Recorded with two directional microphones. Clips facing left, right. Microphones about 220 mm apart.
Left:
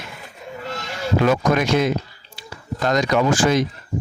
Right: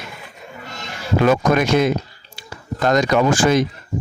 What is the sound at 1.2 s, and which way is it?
Speech, 50° right (ahead or behind).